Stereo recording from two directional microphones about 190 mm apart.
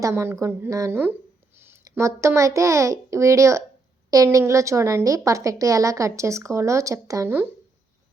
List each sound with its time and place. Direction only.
0.0 s a woman's voice: 15° right (ahead or behind)